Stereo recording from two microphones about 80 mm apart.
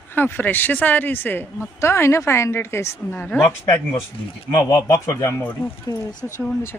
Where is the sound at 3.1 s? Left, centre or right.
Left.